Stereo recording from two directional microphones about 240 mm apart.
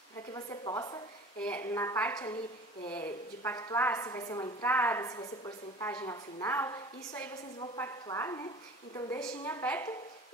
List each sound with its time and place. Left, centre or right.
0.3 s speech: centre
1.4 s a woman's voice: centre
3.4 s a woman's voice: centre